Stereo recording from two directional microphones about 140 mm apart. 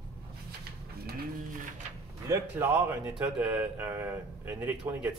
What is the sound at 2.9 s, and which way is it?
Speech, 10° right (ahead or behind).